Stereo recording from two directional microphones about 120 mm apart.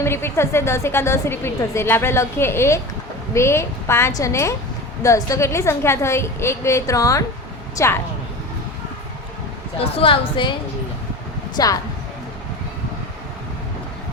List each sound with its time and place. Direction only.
0.0 s a woman's voice: 20° left (ahead or behind)
9.7 s a woman's voice: 55° left (ahead or behind)
11.5 s speech: 30° left (ahead or behind)